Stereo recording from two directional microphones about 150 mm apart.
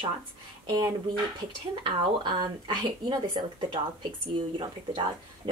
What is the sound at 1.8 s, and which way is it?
A woman's voice, 30° right (ahead or behind).